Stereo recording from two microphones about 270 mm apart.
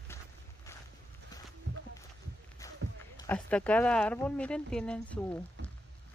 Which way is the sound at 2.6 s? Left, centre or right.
Centre.